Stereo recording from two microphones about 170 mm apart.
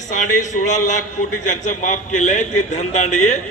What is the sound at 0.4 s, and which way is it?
A man's voice, 45° left (ahead or behind).